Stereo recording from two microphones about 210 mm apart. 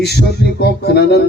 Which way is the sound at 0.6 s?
50° left (ahead or behind).